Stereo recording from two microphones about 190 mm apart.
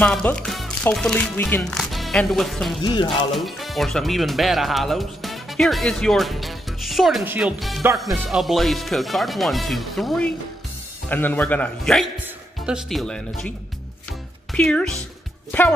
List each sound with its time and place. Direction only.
0.0 s speech: 5° left (ahead or behind)
2.8 s music: 25° left (ahead or behind)
3.3 s a man's voice: centre (ahead or behind)
14.5 s a man's voice: 5° left (ahead or behind)